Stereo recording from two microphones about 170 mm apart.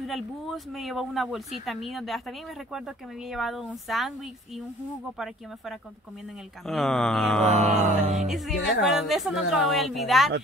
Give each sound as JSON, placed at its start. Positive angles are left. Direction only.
{"t": 0.0, "sound": "speech", "side_deg": 0}
{"t": 6.6, "sound": "speech", "side_deg": 0}
{"t": 7.7, "sound": "a sound", "side_deg": -40}
{"t": 8.3, "sound": "speech", "side_deg": 0}